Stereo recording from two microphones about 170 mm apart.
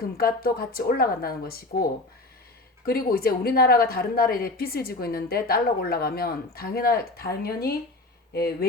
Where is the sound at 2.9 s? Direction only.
60° left (ahead or behind).